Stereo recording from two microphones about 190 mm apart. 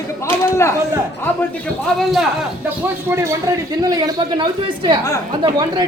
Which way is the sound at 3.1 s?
15° right (ahead or behind).